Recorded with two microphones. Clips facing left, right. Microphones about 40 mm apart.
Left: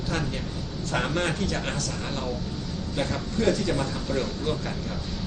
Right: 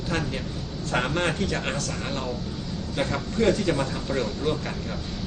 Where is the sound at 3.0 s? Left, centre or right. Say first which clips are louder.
Right 2 dB; right.